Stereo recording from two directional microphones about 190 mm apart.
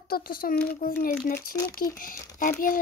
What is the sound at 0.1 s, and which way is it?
A child's voice, 50° left (ahead or behind).